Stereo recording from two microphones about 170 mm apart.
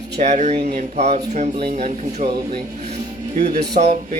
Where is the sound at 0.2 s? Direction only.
45° right (ahead or behind).